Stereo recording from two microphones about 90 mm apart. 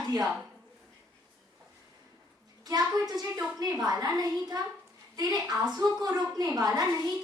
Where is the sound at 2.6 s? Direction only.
45° right (ahead or behind).